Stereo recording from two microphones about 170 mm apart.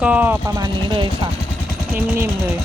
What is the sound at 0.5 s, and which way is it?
Speech, 25° right (ahead or behind).